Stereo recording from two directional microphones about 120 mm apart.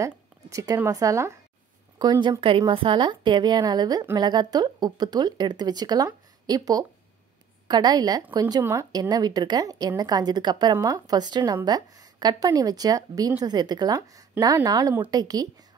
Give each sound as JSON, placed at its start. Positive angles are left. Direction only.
{"t": 0.0, "sound": "speech", "side_deg": -25}
{"t": 2.4, "sound": "a woman's voice", "side_deg": -45}
{"t": 8.6, "sound": "a woman's voice", "side_deg": -20}